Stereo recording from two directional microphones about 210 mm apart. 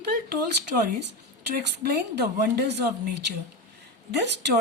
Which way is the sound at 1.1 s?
50° right (ahead or behind).